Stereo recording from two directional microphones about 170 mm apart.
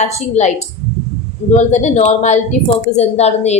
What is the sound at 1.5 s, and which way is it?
A woman's voice, 45° left (ahead or behind).